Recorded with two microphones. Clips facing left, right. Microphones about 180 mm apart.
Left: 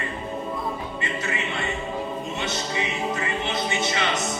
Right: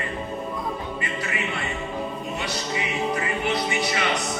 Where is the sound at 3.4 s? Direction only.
25° left (ahead or behind).